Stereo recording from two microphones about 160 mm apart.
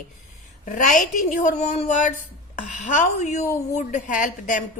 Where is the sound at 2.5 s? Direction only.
50° left (ahead or behind).